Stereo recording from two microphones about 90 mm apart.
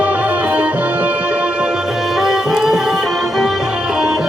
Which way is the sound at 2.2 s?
5° right (ahead or behind).